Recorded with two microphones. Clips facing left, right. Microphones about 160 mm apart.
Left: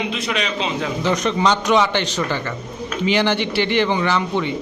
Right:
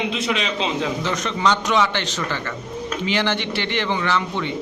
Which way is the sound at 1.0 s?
15° left (ahead or behind).